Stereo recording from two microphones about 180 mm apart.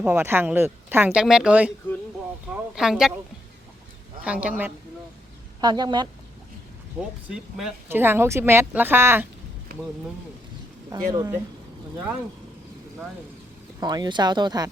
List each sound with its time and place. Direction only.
0.0 s speech: 15° right (ahead or behind)
2.7 s speech: 5° right (ahead or behind)
4.2 s speech: 5° right (ahead or behind)
5.5 s speech: 25° right (ahead or behind)
7.3 s speech: centre (ahead or behind)
9.7 s a sound: 55° right (ahead or behind)
11.1 s speech: 20° right (ahead or behind)
13.7 s speech: 20° right (ahead or behind)